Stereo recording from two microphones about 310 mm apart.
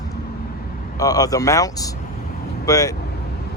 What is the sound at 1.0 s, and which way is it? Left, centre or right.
Speech, centre.